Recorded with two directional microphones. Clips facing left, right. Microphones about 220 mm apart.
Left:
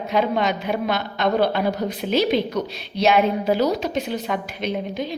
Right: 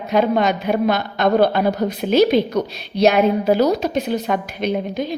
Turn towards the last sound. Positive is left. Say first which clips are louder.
# right 4 dB
turn(degrees=-45)  # may be behind; listen again after turning